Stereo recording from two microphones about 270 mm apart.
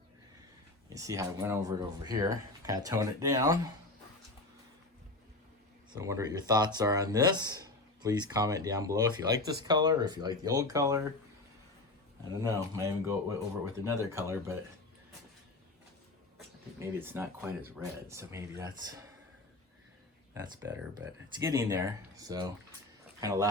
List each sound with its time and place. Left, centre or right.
0.9 s speech: centre
5.9 s speech: centre
12.4 s speech: centre
17.0 s speech: centre
20.9 s speech: centre